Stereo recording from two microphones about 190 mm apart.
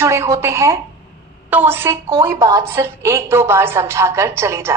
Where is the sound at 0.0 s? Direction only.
15° right (ahead or behind).